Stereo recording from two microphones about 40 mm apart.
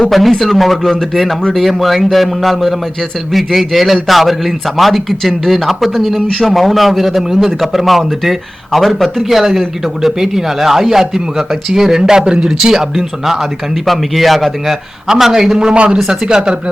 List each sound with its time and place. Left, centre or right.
0.1 s a man's voice: centre
15.7 s speech: right